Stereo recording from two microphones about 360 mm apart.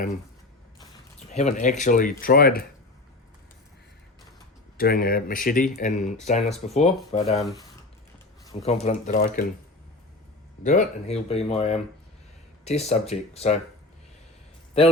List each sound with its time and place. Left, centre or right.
1.3 s speech: centre
4.8 s speech: left
10.6 s speech: left